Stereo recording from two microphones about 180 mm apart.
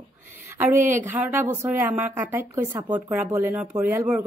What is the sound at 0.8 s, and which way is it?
Speech, 45° right (ahead or behind).